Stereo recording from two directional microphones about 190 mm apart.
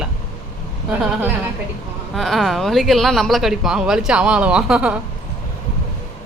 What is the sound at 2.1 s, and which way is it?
A woman's voice, centre (ahead or behind).